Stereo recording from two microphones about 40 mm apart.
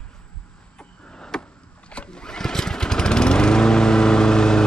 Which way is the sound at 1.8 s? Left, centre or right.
Left.